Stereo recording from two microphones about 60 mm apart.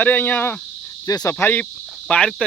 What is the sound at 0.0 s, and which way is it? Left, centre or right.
Speech, left.